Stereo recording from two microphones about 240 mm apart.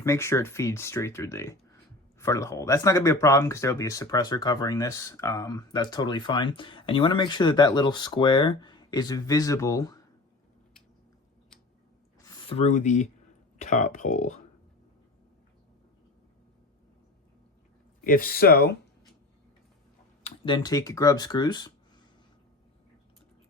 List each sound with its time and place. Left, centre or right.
0.0 s speech: centre
12.3 s speech: left
18.0 s speech: left
20.2 s speech: left